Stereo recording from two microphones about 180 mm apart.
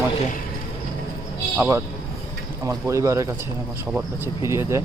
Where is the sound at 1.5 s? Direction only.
10° right (ahead or behind).